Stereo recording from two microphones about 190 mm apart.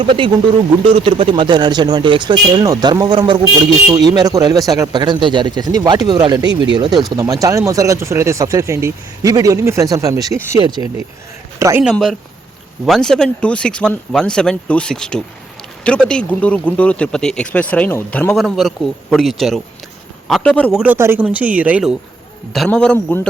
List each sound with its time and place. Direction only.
0.0 s speech: 25° right (ahead or behind)
11.8 s speech: centre (ahead or behind)
20.7 s speech: 10° right (ahead or behind)